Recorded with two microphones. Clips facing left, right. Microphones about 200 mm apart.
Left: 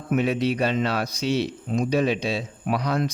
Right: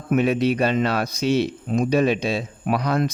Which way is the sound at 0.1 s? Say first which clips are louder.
Right 3 dB; 55° right (ahead or behind).